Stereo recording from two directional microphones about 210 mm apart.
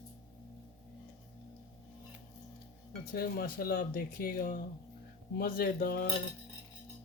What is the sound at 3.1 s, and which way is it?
Speech, 45° left (ahead or behind).